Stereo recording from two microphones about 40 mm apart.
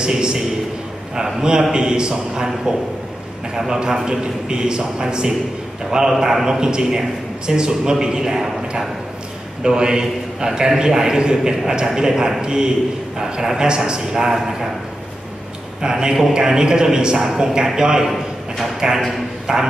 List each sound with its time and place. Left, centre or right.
0.0 s a man's voice: centre
15.8 s a man's voice: centre
18.9 s a sound: centre